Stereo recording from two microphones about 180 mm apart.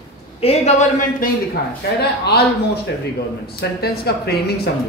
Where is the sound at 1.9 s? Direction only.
65° left (ahead or behind).